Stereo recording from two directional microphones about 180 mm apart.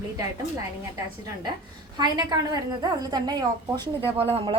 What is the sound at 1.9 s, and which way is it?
A woman's voice, 25° right (ahead or behind).